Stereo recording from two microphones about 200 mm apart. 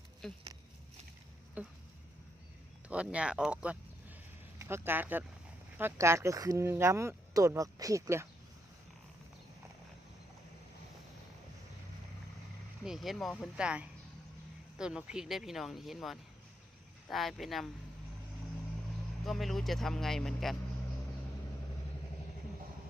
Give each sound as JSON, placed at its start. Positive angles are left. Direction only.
{"t": 0.2, "sound": "speech", "side_deg": 0}
{"t": 1.6, "sound": "speech", "side_deg": -5}
{"t": 2.9, "sound": "speech", "side_deg": -5}
{"t": 12.8, "sound": "speech", "side_deg": 0}
{"t": 19.2, "sound": "speech", "side_deg": 0}